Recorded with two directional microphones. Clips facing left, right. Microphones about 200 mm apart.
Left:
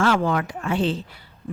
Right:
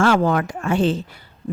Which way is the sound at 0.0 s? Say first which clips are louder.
Right 3 dB; 45° right (ahead or behind).